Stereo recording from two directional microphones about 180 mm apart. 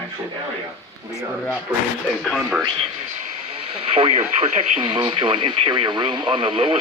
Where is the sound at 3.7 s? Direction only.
30° right (ahead or behind).